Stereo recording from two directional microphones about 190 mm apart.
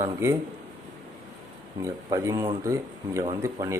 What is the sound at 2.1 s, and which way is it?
Speech, 20° right (ahead or behind).